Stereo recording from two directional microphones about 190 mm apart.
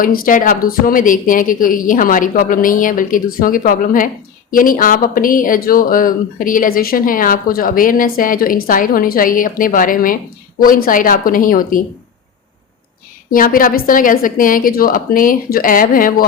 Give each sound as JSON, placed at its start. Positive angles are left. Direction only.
{"t": 0.0, "sound": "speech", "side_deg": 45}
{"t": 13.3, "sound": "speech", "side_deg": 45}